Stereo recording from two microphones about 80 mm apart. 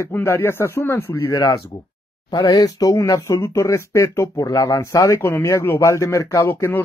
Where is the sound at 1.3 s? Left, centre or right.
Left.